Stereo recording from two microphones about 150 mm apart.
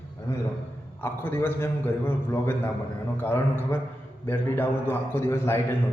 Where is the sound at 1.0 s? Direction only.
15° left (ahead or behind).